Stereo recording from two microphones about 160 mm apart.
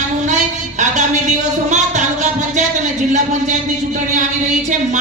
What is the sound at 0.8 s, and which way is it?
Music, 50° right (ahead or behind).